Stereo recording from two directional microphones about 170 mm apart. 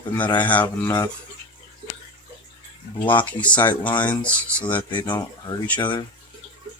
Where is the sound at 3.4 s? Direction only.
10° left (ahead or behind).